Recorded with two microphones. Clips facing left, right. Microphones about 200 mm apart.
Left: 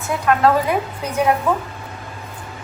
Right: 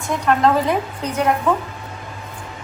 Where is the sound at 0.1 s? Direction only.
5° left (ahead or behind).